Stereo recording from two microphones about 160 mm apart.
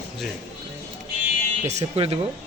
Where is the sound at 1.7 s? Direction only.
40° right (ahead or behind).